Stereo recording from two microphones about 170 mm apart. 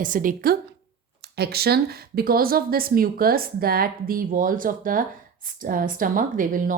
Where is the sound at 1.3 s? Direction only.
70° right (ahead or behind).